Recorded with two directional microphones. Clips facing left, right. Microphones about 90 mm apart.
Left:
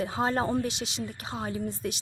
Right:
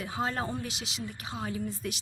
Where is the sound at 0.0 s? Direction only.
30° left (ahead or behind).